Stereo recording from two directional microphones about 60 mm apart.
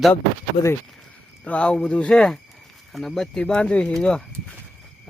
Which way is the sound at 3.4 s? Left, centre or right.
Centre.